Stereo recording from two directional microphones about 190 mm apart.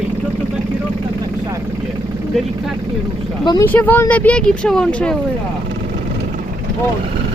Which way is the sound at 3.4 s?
25° left (ahead or behind).